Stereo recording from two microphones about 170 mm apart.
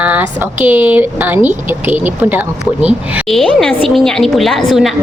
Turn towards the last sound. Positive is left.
turn(degrees=0)  # may be behind; listen again after turning